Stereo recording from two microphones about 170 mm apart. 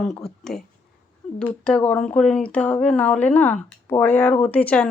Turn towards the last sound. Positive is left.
turn(degrees=10)  # may be behind; listen again after turning